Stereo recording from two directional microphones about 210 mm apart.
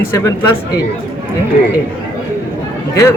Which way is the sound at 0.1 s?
15° left (ahead or behind).